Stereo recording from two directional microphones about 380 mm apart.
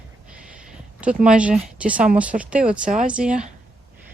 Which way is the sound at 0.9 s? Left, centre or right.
Centre.